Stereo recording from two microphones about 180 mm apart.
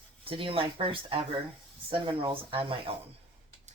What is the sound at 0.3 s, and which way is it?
Speech, 30° right (ahead or behind).